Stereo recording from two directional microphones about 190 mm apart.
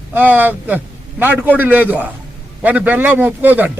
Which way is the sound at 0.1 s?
10° right (ahead or behind).